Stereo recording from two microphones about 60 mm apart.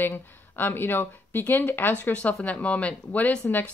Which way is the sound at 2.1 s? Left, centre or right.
Left.